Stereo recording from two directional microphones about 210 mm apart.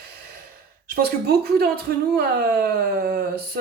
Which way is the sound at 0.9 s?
45° right (ahead or behind).